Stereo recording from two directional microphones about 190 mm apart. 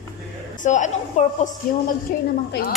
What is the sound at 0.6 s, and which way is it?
A woman's voice, 40° left (ahead or behind).